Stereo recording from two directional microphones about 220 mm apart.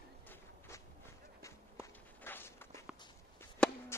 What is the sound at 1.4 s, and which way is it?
Walk, 10° left (ahead or behind).